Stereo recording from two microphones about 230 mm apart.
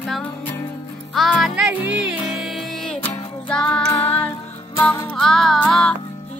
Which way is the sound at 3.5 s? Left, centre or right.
Centre.